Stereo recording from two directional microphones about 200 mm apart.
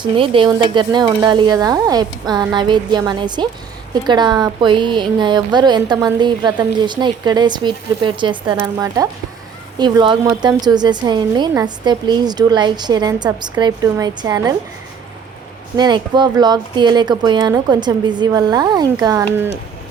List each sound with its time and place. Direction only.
0.0 s speech: 25° right (ahead or behind)
15.7 s speech: 20° right (ahead or behind)